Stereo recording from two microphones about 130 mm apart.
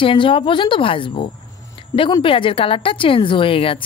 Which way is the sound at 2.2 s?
45° left (ahead or behind).